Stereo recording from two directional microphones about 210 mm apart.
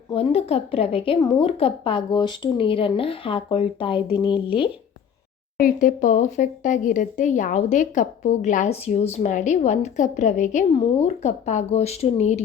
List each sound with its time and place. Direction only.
0.1 s a woman's voice: 25° left (ahead or behind)
5.5 s speech: 40° left (ahead or behind)